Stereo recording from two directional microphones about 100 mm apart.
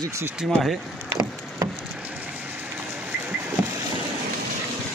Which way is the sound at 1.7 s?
5° right (ahead or behind).